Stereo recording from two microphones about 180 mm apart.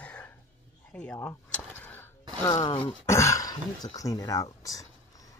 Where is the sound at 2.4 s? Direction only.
20° left (ahead or behind).